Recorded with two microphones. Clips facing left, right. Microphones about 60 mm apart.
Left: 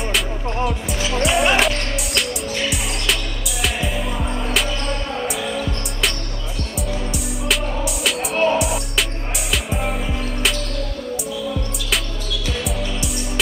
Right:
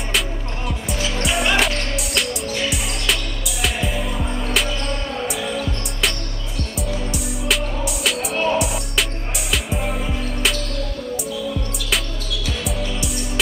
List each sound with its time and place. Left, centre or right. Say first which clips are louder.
1.2 s music: left 3 dB; centre
6.9 s music: even; centre